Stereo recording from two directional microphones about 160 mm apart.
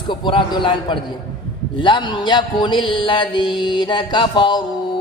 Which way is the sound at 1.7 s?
30° left (ahead or behind).